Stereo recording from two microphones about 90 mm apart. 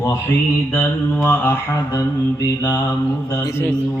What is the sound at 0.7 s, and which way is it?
Mantra, 25° left (ahead or behind).